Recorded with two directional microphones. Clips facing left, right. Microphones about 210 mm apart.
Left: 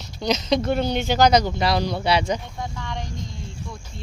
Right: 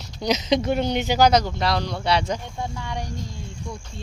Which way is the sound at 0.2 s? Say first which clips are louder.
Even; 15° right (ahead or behind).